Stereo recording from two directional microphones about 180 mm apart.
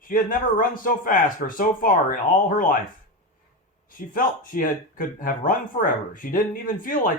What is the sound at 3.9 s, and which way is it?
Speech, 50° left (ahead or behind).